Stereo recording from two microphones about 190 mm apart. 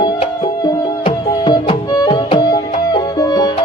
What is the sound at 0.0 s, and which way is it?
Music, 25° left (ahead or behind).